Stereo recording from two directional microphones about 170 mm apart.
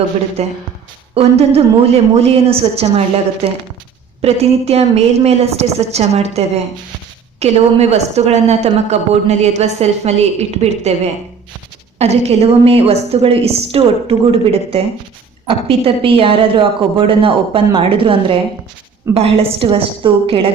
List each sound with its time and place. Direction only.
0.4 s a woman's voice: 40° right (ahead or behind)